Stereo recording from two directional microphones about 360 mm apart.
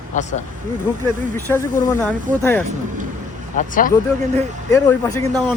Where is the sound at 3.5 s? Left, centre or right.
Left.